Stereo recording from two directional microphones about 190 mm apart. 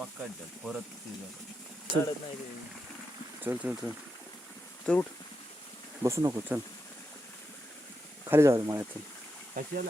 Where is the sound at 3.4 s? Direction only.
10° right (ahead or behind).